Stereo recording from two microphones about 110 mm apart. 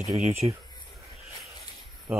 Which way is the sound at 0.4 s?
40° right (ahead or behind).